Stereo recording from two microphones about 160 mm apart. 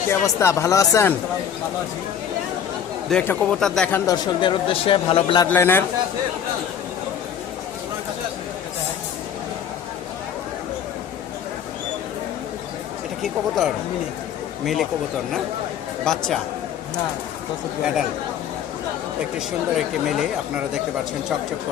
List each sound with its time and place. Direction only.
0.1 s speech: 15° left (ahead or behind)
3.1 s speech: 10° left (ahead or behind)
4.0 s speech: 25° left (ahead or behind)
5.5 s speech: 15° left (ahead or behind)
14.6 s speech: centre (ahead or behind)
16.0 s speech: 5° left (ahead or behind)
19.7 s speech: centre (ahead or behind)